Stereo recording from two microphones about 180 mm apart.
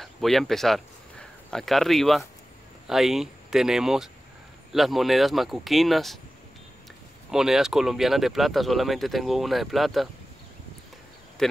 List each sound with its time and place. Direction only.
0.0 s speech: centre (ahead or behind)
7.2 s speech: centre (ahead or behind)